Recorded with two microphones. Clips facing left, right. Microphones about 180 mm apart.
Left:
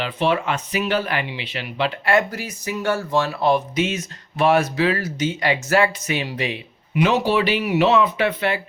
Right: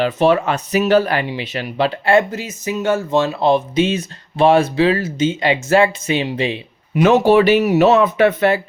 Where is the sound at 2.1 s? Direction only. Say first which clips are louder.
Right 4 dB; 25° right (ahead or behind).